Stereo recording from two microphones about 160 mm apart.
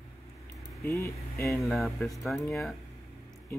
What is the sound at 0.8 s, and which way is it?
Speech, 15° left (ahead or behind).